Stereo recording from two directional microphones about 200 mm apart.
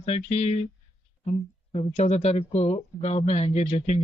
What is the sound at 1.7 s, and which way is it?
Speech, 35° left (ahead or behind).